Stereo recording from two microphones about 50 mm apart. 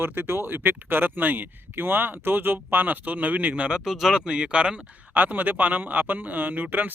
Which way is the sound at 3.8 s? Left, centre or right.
Centre.